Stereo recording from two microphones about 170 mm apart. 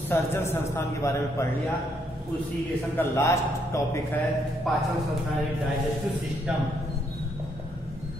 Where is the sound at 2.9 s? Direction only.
15° left (ahead or behind).